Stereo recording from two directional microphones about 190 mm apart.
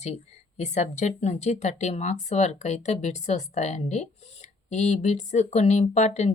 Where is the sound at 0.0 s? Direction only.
35° left (ahead or behind).